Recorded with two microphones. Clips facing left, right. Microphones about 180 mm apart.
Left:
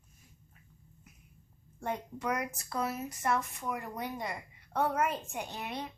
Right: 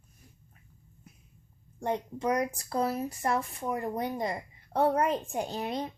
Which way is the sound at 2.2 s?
35° right (ahead or behind).